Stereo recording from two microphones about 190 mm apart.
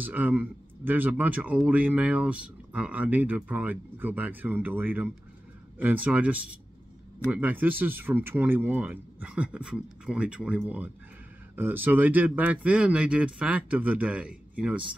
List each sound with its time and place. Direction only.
0.0 s speech: 10° right (ahead or behind)